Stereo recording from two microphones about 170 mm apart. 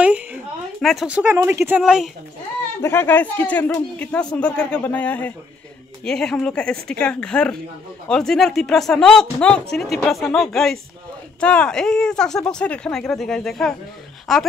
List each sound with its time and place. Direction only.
0.0 s a sound: 5° right (ahead or behind)
0.7 s speech: centre (ahead or behind)
2.8 s speech: 15° left (ahead or behind)